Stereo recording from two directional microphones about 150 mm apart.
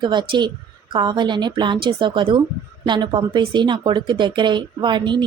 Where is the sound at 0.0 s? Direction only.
30° right (ahead or behind).